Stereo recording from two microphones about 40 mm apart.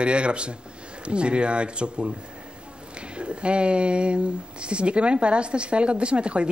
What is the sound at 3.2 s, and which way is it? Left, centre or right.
Speech, right.